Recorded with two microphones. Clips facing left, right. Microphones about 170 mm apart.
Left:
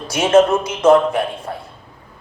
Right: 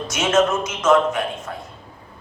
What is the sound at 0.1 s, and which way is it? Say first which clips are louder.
A man's voice: left 6 dB; 30° left (ahead or behind).